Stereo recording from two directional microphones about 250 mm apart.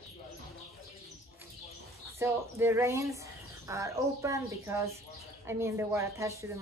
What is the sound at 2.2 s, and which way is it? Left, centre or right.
Speech, centre.